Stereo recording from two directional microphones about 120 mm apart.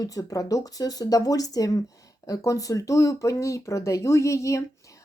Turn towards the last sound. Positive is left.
turn(degrees=25)  # may be behind; listen again after turning